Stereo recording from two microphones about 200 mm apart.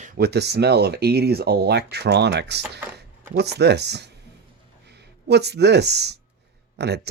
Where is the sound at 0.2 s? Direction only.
55° right (ahead or behind).